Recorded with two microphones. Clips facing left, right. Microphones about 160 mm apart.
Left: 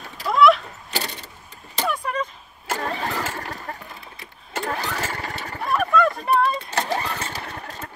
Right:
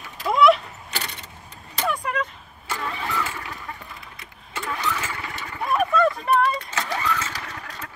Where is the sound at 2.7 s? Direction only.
40° left (ahead or behind).